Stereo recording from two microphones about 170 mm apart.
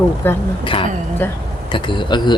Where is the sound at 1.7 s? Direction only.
30° left (ahead or behind).